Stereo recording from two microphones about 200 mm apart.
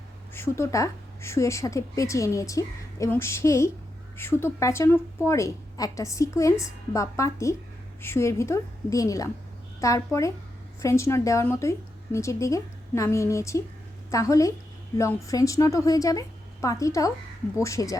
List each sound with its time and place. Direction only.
0.3 s a woman's voice: 15° left (ahead or behind)